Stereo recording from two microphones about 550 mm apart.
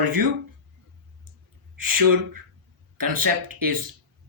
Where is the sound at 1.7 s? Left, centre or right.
Right.